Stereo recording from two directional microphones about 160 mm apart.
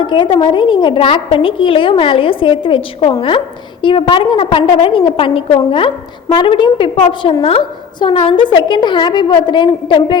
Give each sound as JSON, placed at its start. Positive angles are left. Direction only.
{"t": 0.0, "sound": "a woman's voice", "side_deg": 30}